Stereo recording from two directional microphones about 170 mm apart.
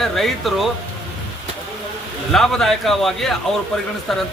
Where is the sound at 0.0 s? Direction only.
Centre (ahead or behind).